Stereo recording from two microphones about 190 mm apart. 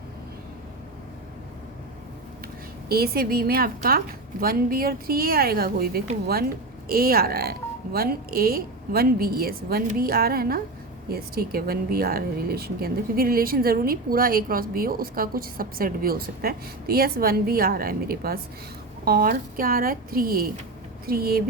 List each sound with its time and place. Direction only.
2.9 s speech: 55° right (ahead or behind)